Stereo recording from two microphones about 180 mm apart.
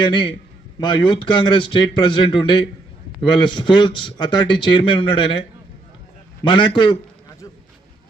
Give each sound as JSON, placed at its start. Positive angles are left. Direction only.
{"t": 0.0, "sound": "a man's voice", "side_deg": 25}